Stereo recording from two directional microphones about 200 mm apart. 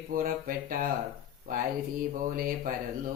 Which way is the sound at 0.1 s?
45° right (ahead or behind).